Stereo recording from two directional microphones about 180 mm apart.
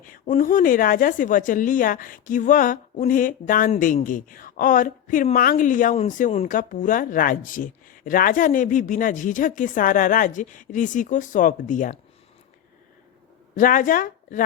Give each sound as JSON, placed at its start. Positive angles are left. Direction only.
{"t": 0.0, "sound": "a woman's voice", "side_deg": 45}
{"t": 13.6, "sound": "a woman's voice", "side_deg": 50}